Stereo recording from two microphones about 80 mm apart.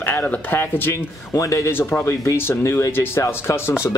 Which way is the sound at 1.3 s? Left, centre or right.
Left.